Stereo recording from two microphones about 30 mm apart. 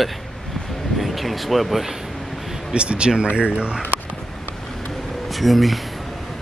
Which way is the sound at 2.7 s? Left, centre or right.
Right.